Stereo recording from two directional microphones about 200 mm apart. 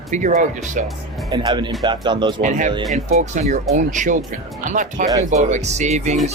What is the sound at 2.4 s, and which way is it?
Speech, 40° right (ahead or behind).